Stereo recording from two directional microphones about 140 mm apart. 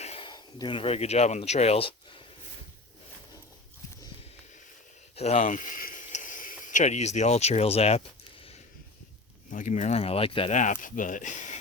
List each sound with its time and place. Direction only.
0.0 s a sound: 45° left (ahead or behind)
0.3 s speech: 30° left (ahead or behind)
5.1 s speech: 45° left (ahead or behind)
5.5 s a sound: 75° left (ahead or behind); by 8.5 s 45° left (ahead or behind)
9.5 s speech: 65° left (ahead or behind); by 10.5 s 40° left (ahead or behind)
10.5 s speech: 60° left (ahead or behind)